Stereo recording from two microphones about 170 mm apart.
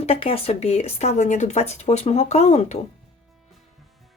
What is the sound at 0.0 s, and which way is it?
Speech, 35° left (ahead or behind).